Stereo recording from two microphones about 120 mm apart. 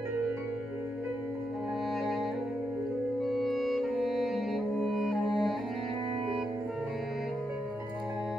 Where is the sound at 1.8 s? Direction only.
Centre (ahead or behind).